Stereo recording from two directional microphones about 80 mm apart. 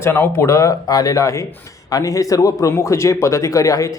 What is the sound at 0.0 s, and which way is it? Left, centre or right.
Speech, left.